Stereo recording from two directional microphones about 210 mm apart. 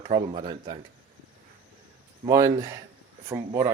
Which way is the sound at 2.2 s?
15° right (ahead or behind).